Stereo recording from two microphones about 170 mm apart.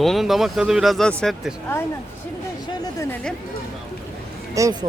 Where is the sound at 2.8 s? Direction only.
15° left (ahead or behind).